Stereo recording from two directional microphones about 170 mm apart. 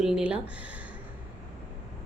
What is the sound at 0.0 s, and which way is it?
Speech, 5° right (ahead or behind).